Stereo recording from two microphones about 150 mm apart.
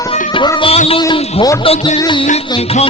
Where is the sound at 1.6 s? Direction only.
35° left (ahead or behind).